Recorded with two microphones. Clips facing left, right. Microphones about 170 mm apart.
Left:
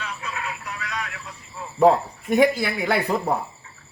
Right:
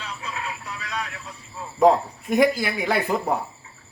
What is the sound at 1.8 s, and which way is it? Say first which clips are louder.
Speech: even; centre (ahead or behind).